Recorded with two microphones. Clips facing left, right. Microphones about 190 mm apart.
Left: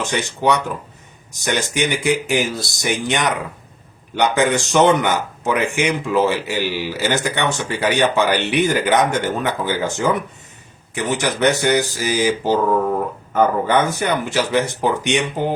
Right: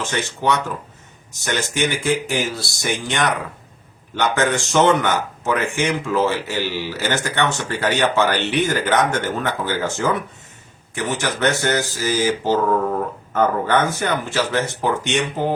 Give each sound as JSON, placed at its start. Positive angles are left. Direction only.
{"t": 0.0, "sound": "speech", "side_deg": 15}